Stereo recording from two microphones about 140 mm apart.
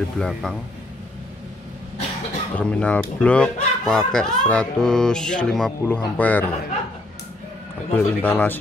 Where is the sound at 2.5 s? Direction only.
10° left (ahead or behind).